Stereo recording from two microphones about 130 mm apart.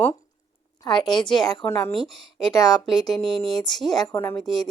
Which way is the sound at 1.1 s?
35° left (ahead or behind).